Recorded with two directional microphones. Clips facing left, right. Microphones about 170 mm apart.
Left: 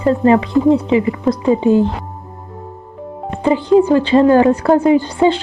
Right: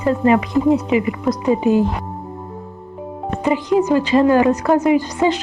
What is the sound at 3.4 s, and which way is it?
Speech, 30° left (ahead or behind).